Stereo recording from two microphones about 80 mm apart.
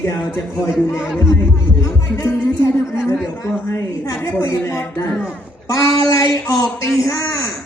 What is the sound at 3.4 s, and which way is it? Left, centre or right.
A woman's voice, left.